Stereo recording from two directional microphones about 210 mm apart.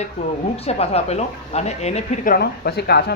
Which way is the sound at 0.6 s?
30° left (ahead or behind).